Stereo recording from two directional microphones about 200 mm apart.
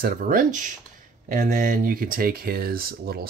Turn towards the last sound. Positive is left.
turn(degrees=-50)  # may be behind; listen again after turning